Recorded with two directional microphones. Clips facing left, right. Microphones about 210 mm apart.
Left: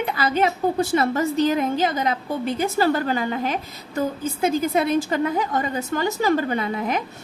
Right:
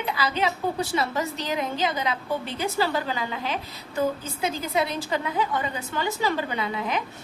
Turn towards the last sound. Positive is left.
turn(degrees=45)  # may be behind; listen again after turning